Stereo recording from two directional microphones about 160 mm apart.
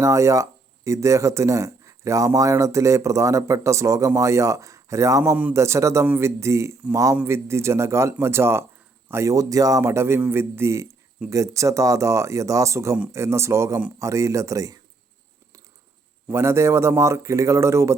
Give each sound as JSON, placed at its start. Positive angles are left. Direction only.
{"t": 0.0, "sound": "a man's voice", "side_deg": -20}
{"t": 16.3, "sound": "a man's voice", "side_deg": -15}